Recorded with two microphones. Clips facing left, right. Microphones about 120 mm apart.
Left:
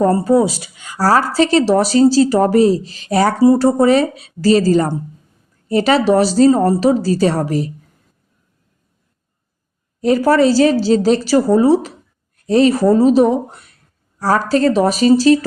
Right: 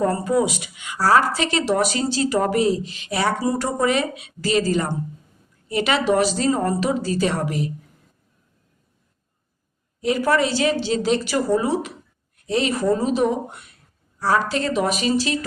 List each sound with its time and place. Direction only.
0.0 s a woman's voice: 30° left (ahead or behind)
10.0 s a woman's voice: 40° left (ahead or behind)